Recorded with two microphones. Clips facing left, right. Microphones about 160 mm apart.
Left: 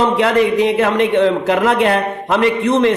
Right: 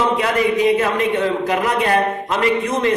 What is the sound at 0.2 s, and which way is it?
A man's voice, 75° left (ahead or behind).